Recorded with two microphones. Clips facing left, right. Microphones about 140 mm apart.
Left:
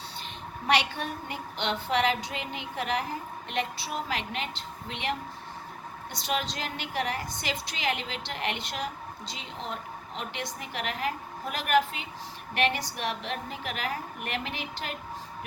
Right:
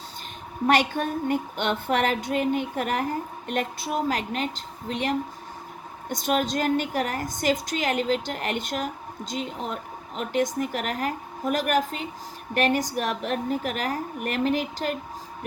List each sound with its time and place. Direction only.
0.7 s a woman's voice: 45° right (ahead or behind)